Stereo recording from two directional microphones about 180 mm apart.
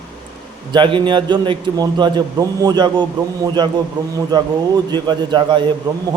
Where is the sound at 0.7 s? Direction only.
25° right (ahead or behind).